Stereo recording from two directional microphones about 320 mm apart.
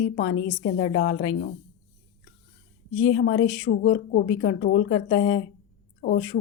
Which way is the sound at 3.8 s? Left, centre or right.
Left.